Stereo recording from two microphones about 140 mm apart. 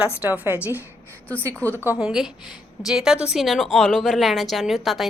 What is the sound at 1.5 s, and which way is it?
Speech, 10° left (ahead or behind).